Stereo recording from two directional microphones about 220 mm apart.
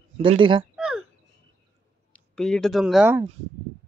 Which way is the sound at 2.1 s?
Centre (ahead or behind).